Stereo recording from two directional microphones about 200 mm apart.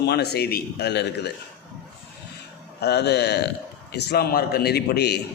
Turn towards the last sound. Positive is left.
turn(degrees=55)  # may be behind; listen again after turning